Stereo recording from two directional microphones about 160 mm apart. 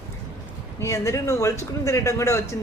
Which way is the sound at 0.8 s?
15° left (ahead or behind).